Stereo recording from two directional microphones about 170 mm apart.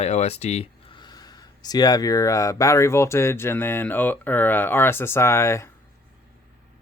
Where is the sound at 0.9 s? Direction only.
25° left (ahead or behind).